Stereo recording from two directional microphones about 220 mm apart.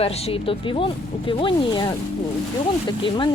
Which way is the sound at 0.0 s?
25° left (ahead or behind).